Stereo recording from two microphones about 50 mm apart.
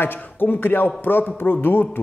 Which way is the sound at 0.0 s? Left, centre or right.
Left.